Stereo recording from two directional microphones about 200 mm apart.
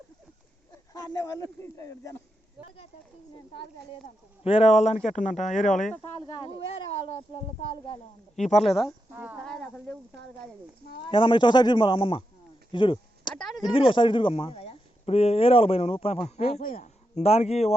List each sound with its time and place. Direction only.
0.9 s speech: 20° left (ahead or behind)
2.6 s speech: 5° right (ahead or behind)
4.4 s speech: 30° left (ahead or behind)
6.0 s speech: 25° left (ahead or behind)
8.5 s speech: centre (ahead or behind)
9.5 s speech: 5° left (ahead or behind)
11.0 s speech: 25° left (ahead or behind)
12.7 s a sound: 25° left (ahead or behind)
13.4 s a sound: centre (ahead or behind)
13.7 s speech: 25° left (ahead or behind)